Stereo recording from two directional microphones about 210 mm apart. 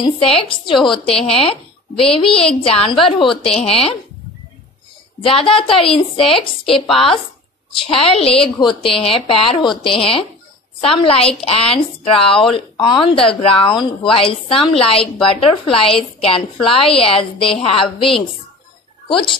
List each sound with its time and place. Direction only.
0.0 s a woman's voice: 25° left (ahead or behind)
3.2 s a woman's voice: centre (ahead or behind)
3.5 s a woman's voice: 25° left (ahead or behind)
5.2 s a woman's voice: 25° left (ahead or behind)
6.9 s a woman's voice: centre (ahead or behind)
8.0 s a woman's voice: 25° left (ahead or behind)